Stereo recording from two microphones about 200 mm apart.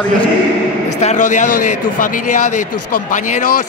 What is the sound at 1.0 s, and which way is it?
A man's voice, 35° left (ahead or behind).